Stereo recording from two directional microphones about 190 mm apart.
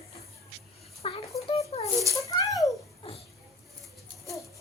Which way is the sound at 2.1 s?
15° left (ahead or behind).